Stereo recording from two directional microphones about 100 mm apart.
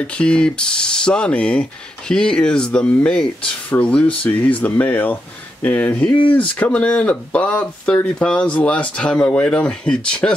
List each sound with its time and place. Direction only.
0.0 s speech: 10° left (ahead or behind)